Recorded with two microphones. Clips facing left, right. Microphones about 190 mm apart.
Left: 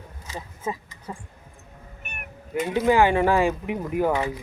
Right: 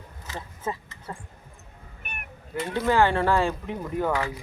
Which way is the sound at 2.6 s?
15° left (ahead or behind).